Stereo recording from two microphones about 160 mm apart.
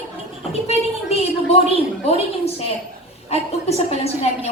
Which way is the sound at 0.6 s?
40° left (ahead or behind).